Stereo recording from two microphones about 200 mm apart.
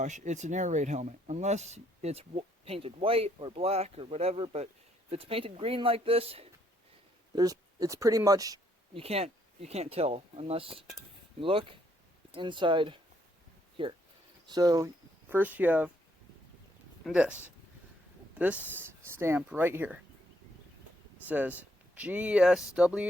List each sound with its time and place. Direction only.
0.0 s speech: 35° right (ahead or behind)
7.3 s speech: 15° right (ahead or behind)
17.1 s speech: 5° right (ahead or behind)
21.2 s speech: 10° right (ahead or behind)